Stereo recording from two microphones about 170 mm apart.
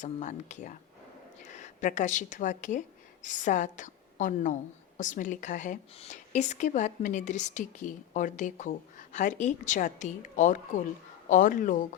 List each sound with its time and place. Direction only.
0.0 s a woman's voice: 45° left (ahead or behind)